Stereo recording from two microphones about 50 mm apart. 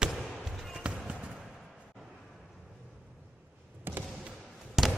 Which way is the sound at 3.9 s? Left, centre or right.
Right.